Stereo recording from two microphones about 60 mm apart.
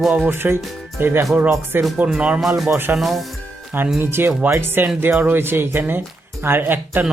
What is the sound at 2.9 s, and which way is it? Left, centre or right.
Speech, centre.